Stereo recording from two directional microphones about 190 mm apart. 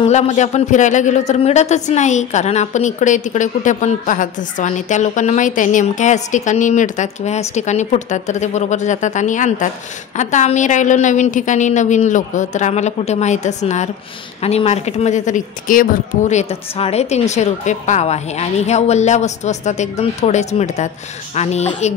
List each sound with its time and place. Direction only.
0.0 s a woman's voice: 35° left (ahead or behind)